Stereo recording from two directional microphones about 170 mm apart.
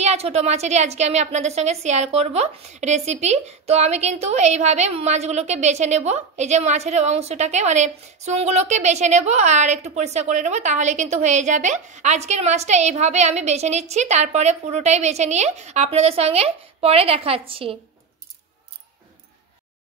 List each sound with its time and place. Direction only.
0.0 s a woman's voice: 40° right (ahead or behind)